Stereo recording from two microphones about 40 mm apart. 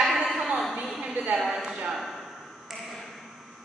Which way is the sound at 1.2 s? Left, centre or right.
Right.